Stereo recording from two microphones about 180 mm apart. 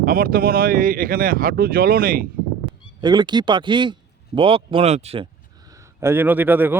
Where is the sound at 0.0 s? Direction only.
50° right (ahead or behind).